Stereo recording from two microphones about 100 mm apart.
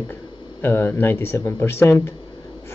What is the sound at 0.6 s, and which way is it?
A man's voice, 25° left (ahead or behind).